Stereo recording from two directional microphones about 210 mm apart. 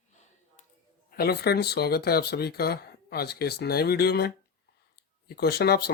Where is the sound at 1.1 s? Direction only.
50° left (ahead or behind).